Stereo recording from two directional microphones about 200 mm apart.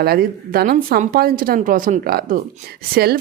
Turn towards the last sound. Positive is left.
turn(degrees=-50)  # may be behind; listen again after turning